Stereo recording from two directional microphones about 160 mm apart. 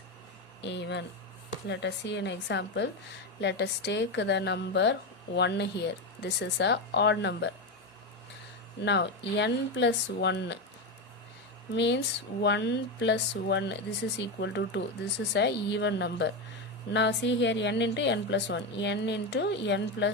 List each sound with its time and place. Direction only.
0.6 s a woman's voice: 90° left
8.8 s a woman's voice: 90° left
11.7 s a woman's voice: 90° left